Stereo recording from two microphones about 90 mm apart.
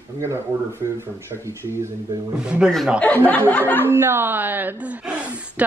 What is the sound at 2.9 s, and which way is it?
Speech, 20° left (ahead or behind).